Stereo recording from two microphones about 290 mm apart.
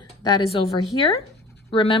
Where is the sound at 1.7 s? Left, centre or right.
Centre.